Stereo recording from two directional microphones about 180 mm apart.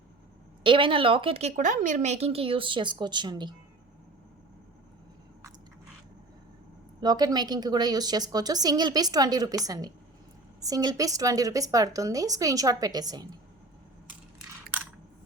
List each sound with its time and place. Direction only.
0.6 s a woman's voice: 30° right (ahead or behind)
7.0 s a woman's voice: 20° right (ahead or behind)